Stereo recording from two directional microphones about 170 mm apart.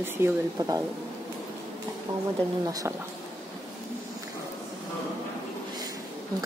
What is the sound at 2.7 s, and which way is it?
Speech, 20° right (ahead or behind).